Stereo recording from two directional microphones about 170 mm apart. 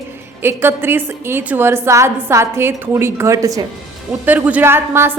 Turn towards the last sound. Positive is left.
turn(degrees=-15)  # may be behind; listen again after turning